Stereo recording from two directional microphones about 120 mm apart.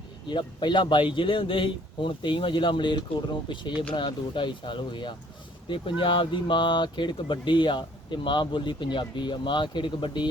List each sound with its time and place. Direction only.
0.3 s speech: 40° left (ahead or behind)